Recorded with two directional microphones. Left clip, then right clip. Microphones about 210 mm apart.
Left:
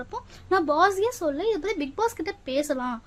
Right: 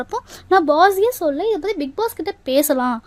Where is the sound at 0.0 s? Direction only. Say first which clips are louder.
Right 10 dB; 40° right (ahead or behind).